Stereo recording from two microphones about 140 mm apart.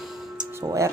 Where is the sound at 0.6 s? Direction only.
25° right (ahead or behind).